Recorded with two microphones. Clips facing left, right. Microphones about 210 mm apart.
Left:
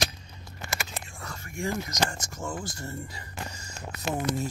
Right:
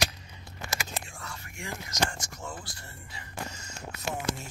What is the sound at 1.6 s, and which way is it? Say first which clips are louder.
Speech: left 4 dB; 40° left (ahead or behind).